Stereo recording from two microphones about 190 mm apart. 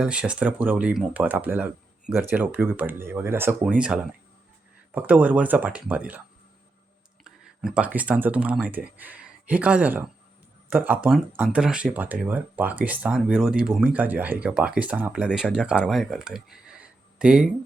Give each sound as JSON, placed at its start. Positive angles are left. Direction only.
{"t": 0.0, "sound": "speech", "side_deg": -5}
{"t": 7.3, "sound": "speech", "side_deg": -5}